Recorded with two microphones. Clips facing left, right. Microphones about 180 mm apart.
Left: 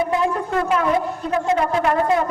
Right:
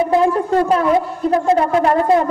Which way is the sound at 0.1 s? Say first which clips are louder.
Right 6 dB; 35° right (ahead or behind).